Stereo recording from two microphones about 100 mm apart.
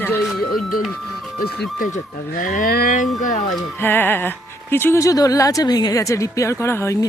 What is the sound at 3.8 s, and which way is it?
Speech, 20° left (ahead or behind).